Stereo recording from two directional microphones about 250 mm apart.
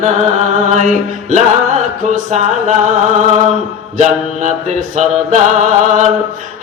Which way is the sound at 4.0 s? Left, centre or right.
Right.